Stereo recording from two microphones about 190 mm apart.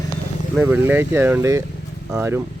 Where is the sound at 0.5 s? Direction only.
10° right (ahead or behind).